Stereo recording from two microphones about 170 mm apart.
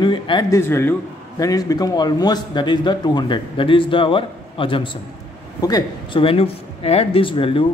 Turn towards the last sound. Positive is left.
turn(degrees=30)  # may be behind; listen again after turning